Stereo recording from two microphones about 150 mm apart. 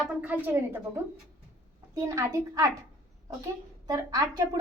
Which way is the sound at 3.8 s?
25° right (ahead or behind).